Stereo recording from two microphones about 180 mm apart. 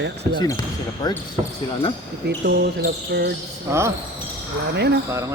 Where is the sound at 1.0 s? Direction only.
20° left (ahead or behind).